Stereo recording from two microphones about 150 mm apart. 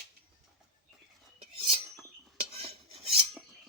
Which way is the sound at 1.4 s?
40° right (ahead or behind).